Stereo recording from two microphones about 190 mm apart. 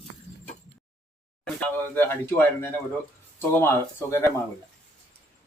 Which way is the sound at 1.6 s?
10° left (ahead or behind).